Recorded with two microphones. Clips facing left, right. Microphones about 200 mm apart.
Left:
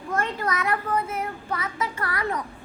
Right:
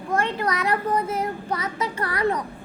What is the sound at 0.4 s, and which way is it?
Child singing, 35° right (ahead or behind).